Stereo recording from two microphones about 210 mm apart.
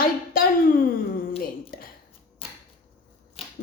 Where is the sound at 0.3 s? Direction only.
45° left (ahead or behind).